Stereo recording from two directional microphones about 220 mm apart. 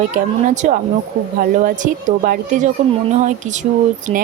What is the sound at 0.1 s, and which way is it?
Speech, 35° right (ahead or behind).